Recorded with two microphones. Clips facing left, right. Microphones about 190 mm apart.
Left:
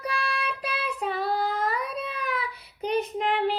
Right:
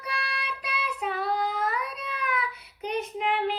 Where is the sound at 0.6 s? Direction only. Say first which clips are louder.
Left 2 dB; 35° left (ahead or behind).